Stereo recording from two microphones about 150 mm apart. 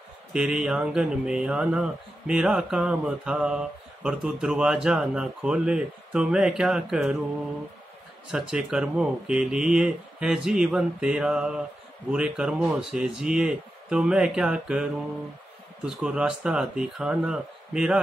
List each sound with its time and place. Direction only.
0.3 s speech: 5° right (ahead or behind)
8.3 s speech: 5° right (ahead or behind)